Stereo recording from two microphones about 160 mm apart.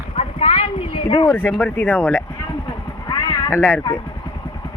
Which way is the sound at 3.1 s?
25° left (ahead or behind).